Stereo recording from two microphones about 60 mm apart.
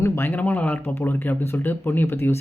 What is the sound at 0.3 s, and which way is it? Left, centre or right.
Speech, left.